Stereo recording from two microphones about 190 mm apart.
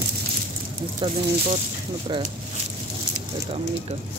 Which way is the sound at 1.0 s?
25° right (ahead or behind).